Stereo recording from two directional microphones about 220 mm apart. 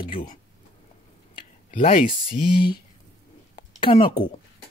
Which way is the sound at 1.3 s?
25° left (ahead or behind).